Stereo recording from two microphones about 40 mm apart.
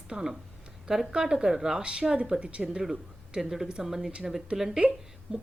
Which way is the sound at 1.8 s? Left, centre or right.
Right.